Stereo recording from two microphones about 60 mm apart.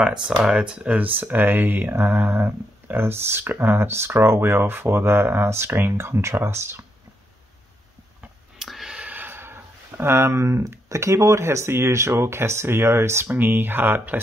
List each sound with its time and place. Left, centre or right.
0.0 s speech: centre
0.9 s speech: right
8.5 s a sound: centre
8.9 s a sound: right
10.9 s speech: right
13.3 s speech: right